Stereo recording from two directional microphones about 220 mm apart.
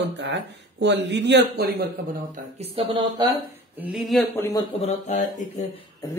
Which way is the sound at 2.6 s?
25° right (ahead or behind).